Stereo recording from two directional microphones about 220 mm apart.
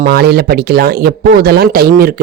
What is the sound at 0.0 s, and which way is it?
A man's voice, 45° right (ahead or behind).